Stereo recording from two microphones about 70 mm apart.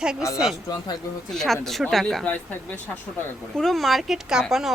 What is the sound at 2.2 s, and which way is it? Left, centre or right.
Speech, left.